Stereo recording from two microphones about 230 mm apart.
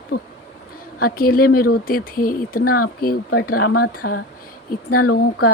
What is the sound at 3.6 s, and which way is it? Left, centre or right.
Speech, left.